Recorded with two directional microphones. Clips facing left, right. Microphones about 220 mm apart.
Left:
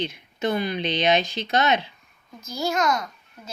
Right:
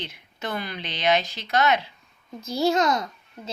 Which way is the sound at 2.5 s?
30° right (ahead or behind).